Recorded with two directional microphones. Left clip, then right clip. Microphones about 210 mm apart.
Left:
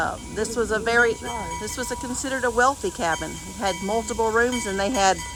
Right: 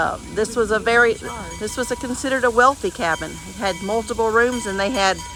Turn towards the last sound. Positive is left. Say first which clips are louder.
# right 2 dB
turn(degrees=10)  # may be behind; listen again after turning